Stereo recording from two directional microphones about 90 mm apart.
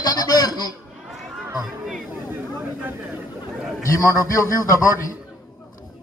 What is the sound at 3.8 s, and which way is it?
A man's voice, 40° left (ahead or behind).